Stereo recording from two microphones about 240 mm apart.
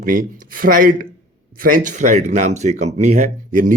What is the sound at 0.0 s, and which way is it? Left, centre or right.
Speech, right.